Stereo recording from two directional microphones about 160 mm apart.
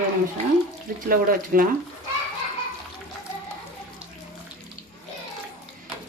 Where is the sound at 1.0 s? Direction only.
65° right (ahead or behind).